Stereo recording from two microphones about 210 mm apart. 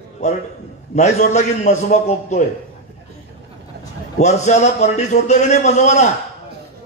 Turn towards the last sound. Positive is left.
turn(degrees=35)  # may be behind; listen again after turning